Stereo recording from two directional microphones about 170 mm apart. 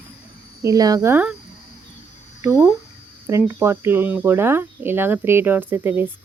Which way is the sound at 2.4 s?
5° right (ahead or behind).